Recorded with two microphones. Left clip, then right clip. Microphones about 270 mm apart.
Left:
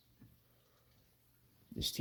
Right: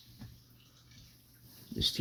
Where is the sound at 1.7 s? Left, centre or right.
Left.